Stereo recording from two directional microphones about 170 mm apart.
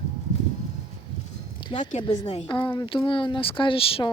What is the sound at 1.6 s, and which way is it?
Speech, 30° left (ahead or behind).